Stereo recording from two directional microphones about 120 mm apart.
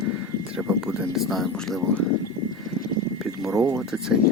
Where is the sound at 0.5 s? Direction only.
5° right (ahead or behind).